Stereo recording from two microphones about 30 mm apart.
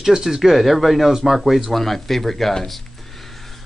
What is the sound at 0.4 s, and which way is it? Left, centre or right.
Speech, centre.